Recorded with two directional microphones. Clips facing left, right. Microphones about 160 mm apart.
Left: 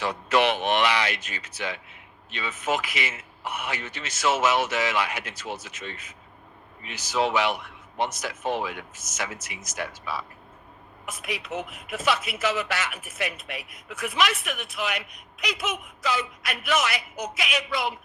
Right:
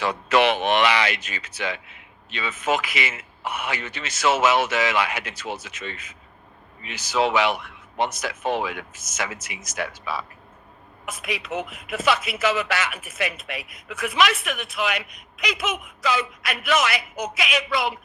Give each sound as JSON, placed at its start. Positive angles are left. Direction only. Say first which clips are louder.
{"t": 0.0, "sound": "speech", "louder": "right 3 dB", "side_deg": -90}